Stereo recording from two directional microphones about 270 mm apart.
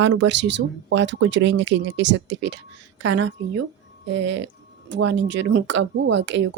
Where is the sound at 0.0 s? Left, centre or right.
Right.